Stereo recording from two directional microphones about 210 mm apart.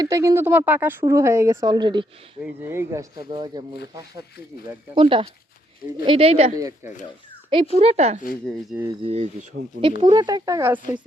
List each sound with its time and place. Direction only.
0.0 s speech: 15° right (ahead or behind)
2.4 s speech: 10° right (ahead or behind)
4.6 s speech: 25° right (ahead or behind)
6.6 s speech: 15° right (ahead or behind)
7.5 s speech: 30° right (ahead or behind)
10.0 s speech: 20° right (ahead or behind)